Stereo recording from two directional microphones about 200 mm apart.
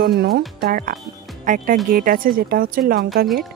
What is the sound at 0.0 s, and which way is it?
Speech, 50° right (ahead or behind).